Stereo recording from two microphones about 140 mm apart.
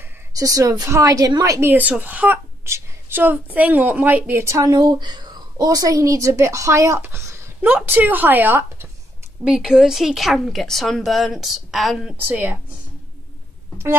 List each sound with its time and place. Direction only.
0.3 s a woman's voice: 25° right (ahead or behind)
1.7 s a woman's voice: 10° right (ahead or behind)
12.2 s a woman's voice: 10° right (ahead or behind)